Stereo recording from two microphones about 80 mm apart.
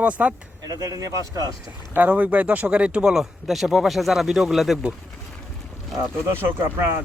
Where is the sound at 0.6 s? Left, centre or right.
Right.